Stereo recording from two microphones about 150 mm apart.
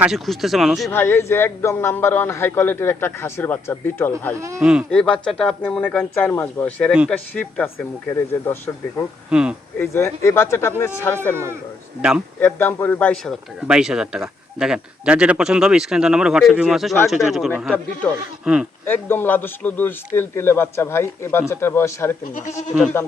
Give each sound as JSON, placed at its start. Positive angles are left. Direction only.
{"t": 0.0, "sound": "speech", "side_deg": 0}
{"t": 0.9, "sound": "a man's voice", "side_deg": 15}
{"t": 4.4, "sound": "speech", "side_deg": -20}
{"t": 4.6, "sound": "speech", "side_deg": -5}
{"t": 4.9, "sound": "a man's voice", "side_deg": 5}
{"t": 9.3, "sound": "speech", "side_deg": -5}
{"t": 9.7, "sound": "a man's voice", "side_deg": 15}
{"t": 12.4, "sound": "a man's voice", "side_deg": 15}
{"t": 13.6, "sound": "speech", "side_deg": -5}
{"t": 18.9, "sound": "a man's voice", "side_deg": 15}
{"t": 22.2, "sound": "speech", "side_deg": 60}